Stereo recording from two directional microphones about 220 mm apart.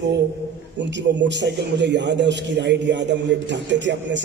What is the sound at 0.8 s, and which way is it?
A man's voice, 55° right (ahead or behind).